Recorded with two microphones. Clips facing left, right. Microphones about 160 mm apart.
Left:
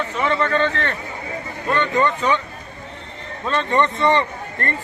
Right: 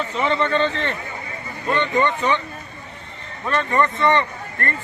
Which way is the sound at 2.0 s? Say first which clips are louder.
Left 1 dB; 10° left (ahead or behind).